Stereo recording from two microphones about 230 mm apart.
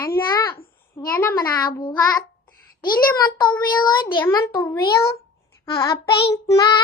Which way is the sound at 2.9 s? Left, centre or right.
Left.